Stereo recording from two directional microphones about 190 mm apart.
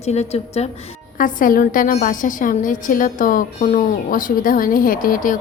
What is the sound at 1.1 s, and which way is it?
A woman's voice, 45° left (ahead or behind).